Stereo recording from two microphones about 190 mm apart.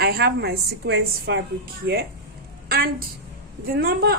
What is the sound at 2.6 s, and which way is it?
A woman's voice, 55° right (ahead or behind).